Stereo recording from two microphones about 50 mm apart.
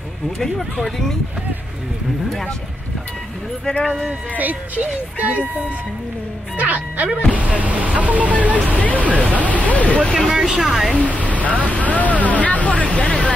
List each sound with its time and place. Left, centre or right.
0.4 s speech: centre
3.6 s speech: centre
4.4 s speech: right
6.5 s speech: right
8.7 s speech: left
10.3 s speech: centre
11.1 s speech: left